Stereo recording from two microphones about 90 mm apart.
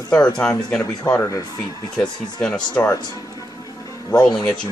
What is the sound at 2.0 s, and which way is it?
Speech, 10° left (ahead or behind).